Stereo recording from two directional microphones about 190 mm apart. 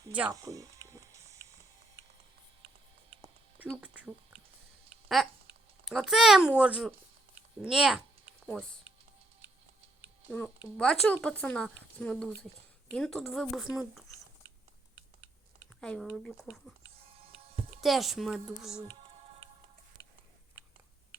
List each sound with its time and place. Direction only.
0.1 s speech: 5° right (ahead or behind)
0.3 s a sound: 15° right (ahead or behind)
3.7 s speech: 5° right (ahead or behind)
10.4 s speech: 5° left (ahead or behind)
15.8 s speech: 5° left (ahead or behind)
17.7 s speech: centre (ahead or behind)